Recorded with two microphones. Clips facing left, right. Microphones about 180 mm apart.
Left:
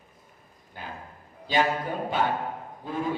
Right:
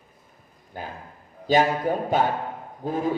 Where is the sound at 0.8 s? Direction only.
45° right (ahead or behind).